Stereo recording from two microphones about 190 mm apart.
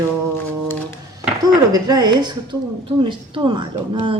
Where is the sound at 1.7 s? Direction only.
20° right (ahead or behind).